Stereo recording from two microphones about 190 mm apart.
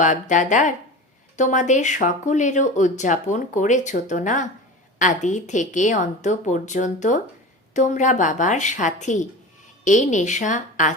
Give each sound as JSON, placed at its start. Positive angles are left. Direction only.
{"t": 0.0, "sound": "speech", "side_deg": 40}